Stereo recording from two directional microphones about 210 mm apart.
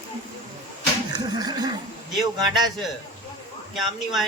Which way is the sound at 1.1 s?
20° right (ahead or behind).